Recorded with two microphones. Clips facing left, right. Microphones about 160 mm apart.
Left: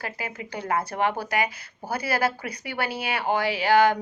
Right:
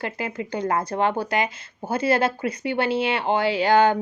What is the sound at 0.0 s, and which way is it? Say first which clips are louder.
A woman's voice: right 5 dB; 30° right (ahead or behind).